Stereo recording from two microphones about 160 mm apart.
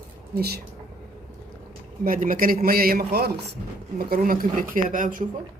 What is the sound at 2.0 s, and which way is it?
Speech, 60° right (ahead or behind).